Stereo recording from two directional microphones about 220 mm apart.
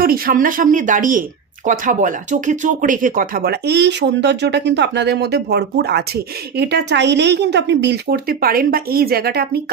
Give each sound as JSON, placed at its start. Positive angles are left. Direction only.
{"t": 0.0, "sound": "speech", "side_deg": -40}